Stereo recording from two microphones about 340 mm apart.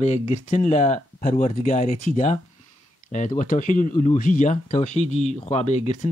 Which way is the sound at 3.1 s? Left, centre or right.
Left.